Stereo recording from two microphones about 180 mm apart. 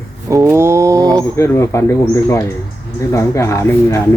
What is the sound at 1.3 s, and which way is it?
Speech, 15° left (ahead or behind).